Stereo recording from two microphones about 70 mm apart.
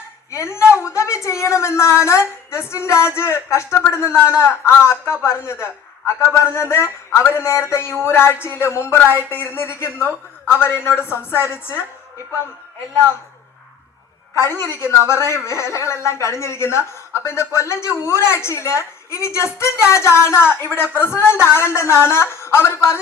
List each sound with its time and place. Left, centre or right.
0.3 s a sound: left
0.7 s a woman's voice: left
14.3 s speech: left